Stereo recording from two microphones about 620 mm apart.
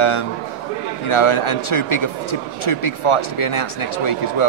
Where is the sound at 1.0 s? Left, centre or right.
Left.